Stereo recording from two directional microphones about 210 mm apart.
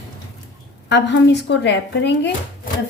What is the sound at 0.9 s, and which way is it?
A woman's voice, 55° left (ahead or behind).